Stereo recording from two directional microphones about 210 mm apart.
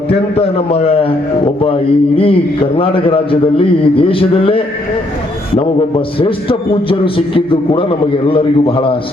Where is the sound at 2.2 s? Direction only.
25° left (ahead or behind).